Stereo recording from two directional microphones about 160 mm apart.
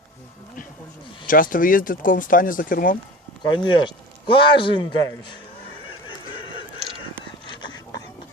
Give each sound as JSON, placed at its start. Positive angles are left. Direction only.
{"t": 1.3, "sound": "speech", "side_deg": 60}
{"t": 3.4, "sound": "speech", "side_deg": 25}
{"t": 7.5, "sound": "a sound", "side_deg": 25}